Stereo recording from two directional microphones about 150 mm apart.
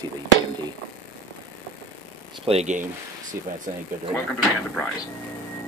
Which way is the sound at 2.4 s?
45° right (ahead or behind).